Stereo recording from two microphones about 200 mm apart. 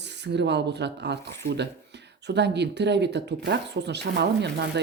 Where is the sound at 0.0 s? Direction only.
60° right (ahead or behind).